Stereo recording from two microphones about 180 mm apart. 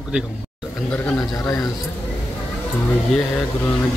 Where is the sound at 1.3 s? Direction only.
15° left (ahead or behind).